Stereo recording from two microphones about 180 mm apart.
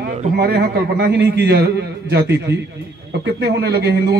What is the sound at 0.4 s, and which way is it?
A man's voice, 65° right (ahead or behind).